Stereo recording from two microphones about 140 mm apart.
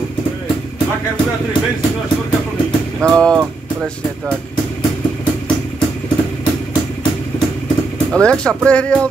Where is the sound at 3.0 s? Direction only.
5° left (ahead or behind).